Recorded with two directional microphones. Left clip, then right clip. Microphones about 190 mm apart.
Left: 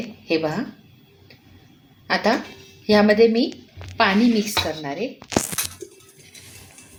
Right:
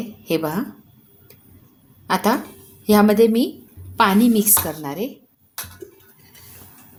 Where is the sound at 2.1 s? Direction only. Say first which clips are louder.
Right 1 dB; 65° right (ahead or behind).